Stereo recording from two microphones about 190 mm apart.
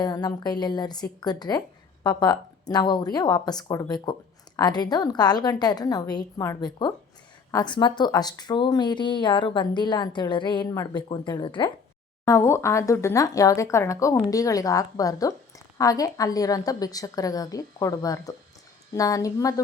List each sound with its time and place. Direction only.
0.0 s speech: 20° left (ahead or behind)